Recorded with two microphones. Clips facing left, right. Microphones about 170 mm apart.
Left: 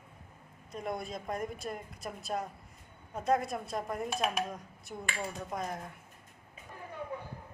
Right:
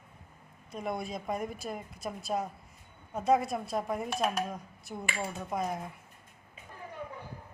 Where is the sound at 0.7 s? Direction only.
Centre (ahead or behind).